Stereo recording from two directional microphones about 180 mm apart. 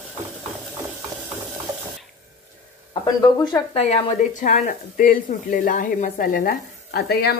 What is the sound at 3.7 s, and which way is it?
Speech, 35° left (ahead or behind).